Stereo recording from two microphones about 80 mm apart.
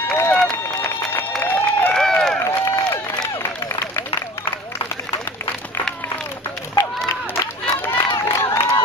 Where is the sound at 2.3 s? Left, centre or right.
Left.